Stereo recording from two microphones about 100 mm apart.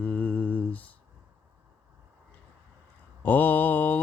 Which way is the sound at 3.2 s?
15° left (ahead or behind).